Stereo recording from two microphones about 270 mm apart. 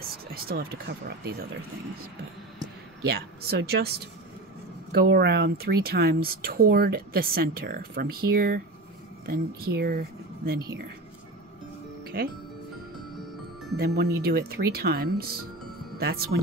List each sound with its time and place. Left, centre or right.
0.3 s speech: right
3.1 s speech: right
4.9 s speech: right
13.7 s speech: right